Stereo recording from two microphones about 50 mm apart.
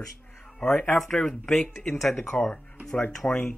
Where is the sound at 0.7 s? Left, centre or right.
Left.